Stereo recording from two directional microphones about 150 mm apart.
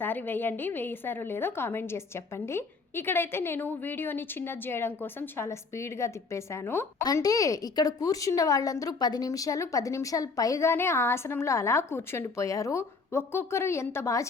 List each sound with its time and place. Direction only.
0.0 s a woman's voice: 15° left (ahead or behind)